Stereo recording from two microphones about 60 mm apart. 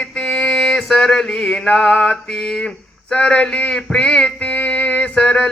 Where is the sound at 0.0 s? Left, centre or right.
Centre.